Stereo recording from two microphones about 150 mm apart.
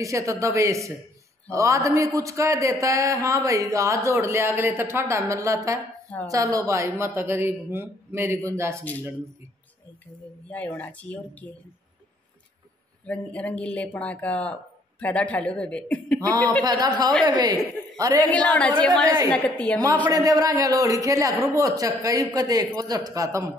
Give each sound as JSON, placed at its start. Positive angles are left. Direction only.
{"t": 0.0, "sound": "speech", "side_deg": -20}
{"t": 10.5, "sound": "a woman's voice", "side_deg": 10}
{"t": 13.0, "sound": "a woman's voice", "side_deg": 10}
{"t": 16.2, "sound": "speech", "side_deg": -25}
{"t": 18.3, "sound": "a woman's voice", "side_deg": 10}
{"t": 20.1, "sound": "speech", "side_deg": -25}